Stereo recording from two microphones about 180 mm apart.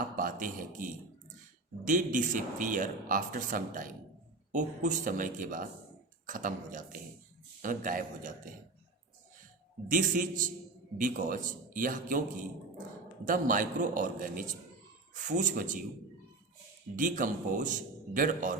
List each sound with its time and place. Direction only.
0.2 s a man's voice: 50° right (ahead or behind)
9.9 s speech: 50° right (ahead or behind)
16.9 s speech: 50° right (ahead or behind)